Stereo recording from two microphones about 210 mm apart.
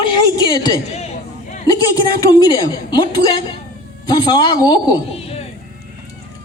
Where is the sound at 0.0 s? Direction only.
20° left (ahead or behind).